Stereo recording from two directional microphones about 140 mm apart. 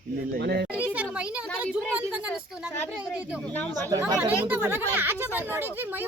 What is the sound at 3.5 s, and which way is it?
Speech, 10° left (ahead or behind).